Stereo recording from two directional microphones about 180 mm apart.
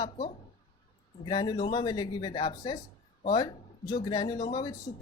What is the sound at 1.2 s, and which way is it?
A woman's voice, 25° left (ahead or behind).